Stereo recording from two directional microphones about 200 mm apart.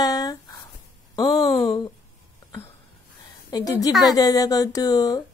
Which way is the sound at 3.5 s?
20° left (ahead or behind).